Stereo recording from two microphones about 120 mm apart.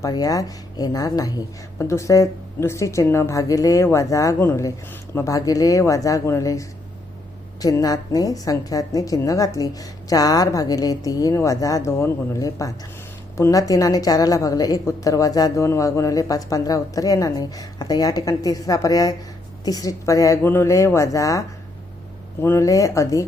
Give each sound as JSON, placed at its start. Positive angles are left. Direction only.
{"t": 0.0, "sound": "a woman's voice", "side_deg": 30}